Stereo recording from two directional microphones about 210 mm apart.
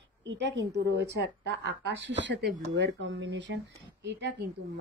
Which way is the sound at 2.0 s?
60° right (ahead or behind).